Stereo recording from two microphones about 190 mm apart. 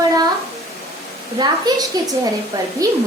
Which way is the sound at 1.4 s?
20° right (ahead or behind).